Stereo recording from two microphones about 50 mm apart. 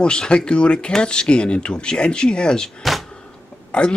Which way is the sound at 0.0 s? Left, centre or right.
Centre.